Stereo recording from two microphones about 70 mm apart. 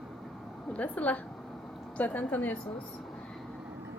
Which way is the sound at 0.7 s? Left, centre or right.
Left.